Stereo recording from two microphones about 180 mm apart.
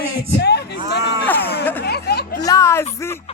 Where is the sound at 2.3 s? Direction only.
20° left (ahead or behind).